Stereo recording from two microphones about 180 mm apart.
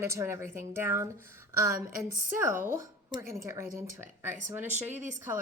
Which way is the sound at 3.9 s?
10° right (ahead or behind).